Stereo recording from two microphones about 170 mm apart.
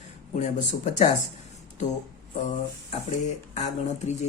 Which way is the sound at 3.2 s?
45° left (ahead or behind).